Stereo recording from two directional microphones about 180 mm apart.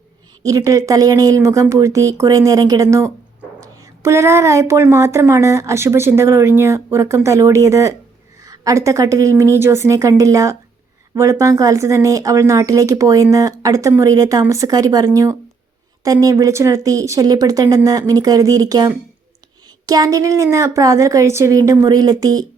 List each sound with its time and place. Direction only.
0.4 s speech: 20° right (ahead or behind)